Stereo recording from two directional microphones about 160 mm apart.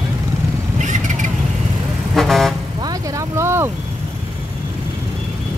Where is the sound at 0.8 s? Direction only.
50° right (ahead or behind).